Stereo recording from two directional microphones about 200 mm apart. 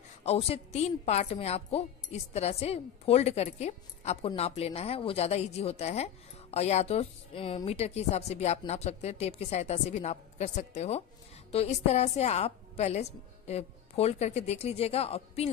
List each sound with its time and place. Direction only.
0.3 s speech: 30° left (ahead or behind)